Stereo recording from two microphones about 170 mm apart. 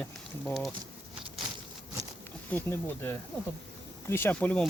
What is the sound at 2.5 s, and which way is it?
Speech, 10° left (ahead or behind).